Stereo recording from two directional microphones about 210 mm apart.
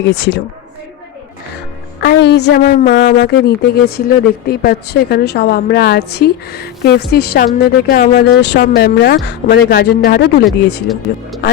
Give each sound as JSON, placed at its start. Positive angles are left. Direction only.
{"t": 0.0, "sound": "a woman's voice", "side_deg": 55}
{"t": 2.0, "sound": "a woman's voice", "side_deg": 55}